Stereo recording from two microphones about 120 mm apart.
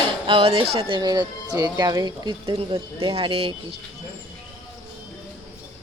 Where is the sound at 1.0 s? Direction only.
35° right (ahead or behind).